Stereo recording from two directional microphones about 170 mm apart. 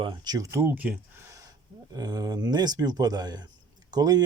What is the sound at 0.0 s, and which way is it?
Speech, 25° right (ahead or behind).